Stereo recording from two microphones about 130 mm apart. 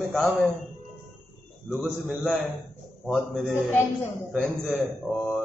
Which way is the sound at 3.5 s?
20° left (ahead or behind).